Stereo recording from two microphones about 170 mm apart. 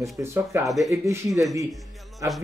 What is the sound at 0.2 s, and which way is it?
Speech, 15° right (ahead or behind).